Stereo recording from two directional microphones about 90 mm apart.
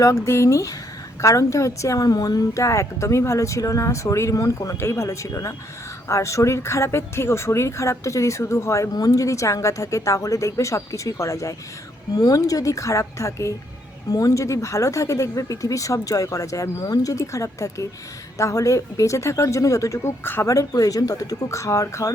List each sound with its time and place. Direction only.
0.0 s speech: 35° left (ahead or behind)
20.2 s speech: 25° left (ahead or behind)
20.5 s speech: 40° left (ahead or behind)